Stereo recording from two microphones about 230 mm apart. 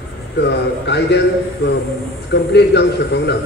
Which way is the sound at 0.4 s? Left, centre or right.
Left.